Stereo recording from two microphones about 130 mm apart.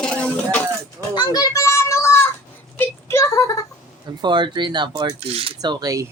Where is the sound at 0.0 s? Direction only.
5° left (ahead or behind).